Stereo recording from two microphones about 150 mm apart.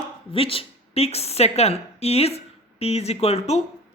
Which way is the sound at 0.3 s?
40° left (ahead or behind).